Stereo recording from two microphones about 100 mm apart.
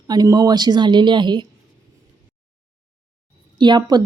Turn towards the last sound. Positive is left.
turn(degrees=-45)  # may be behind; listen again after turning